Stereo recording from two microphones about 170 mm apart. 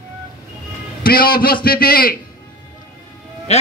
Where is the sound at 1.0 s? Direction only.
60° left (ahead or behind).